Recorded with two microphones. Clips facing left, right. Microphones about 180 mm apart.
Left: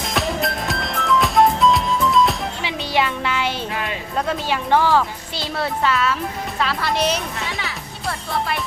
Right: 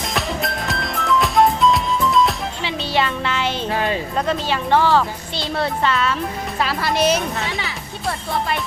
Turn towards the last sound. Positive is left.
turn(degrees=0)  # may be behind; listen again after turning